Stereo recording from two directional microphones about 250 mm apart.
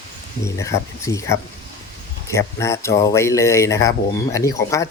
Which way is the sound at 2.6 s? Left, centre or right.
Centre.